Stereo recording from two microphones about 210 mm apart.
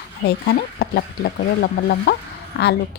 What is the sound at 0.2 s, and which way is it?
A woman's voice, 50° left (ahead or behind).